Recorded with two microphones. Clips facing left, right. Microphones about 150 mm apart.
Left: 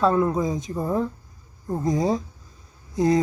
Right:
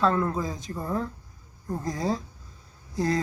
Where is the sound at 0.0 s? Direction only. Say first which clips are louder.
Left 4 dB; 15° left (ahead or behind).